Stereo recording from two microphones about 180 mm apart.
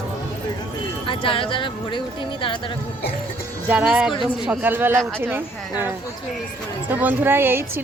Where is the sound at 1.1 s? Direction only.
30° left (ahead or behind).